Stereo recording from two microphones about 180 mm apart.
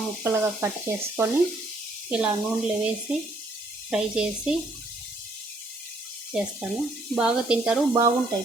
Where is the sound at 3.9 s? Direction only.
5° right (ahead or behind).